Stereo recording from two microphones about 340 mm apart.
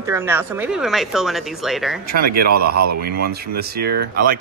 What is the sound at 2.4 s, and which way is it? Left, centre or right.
Speech, right.